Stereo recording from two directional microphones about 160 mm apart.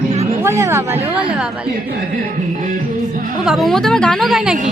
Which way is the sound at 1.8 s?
60° right (ahead or behind).